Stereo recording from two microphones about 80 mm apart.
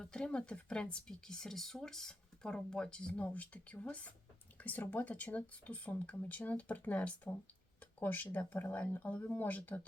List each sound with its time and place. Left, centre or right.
0.0 s speech: centre